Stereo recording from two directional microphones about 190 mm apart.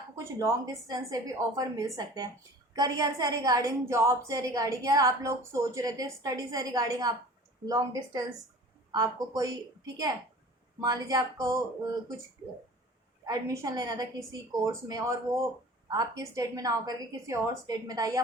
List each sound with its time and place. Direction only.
0.3 s a woman's voice: 15° right (ahead or behind)
13.2 s a woman's voice: 15° right (ahead or behind)